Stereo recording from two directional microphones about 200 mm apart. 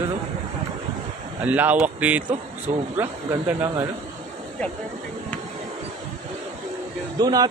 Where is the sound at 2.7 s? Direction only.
30° right (ahead or behind).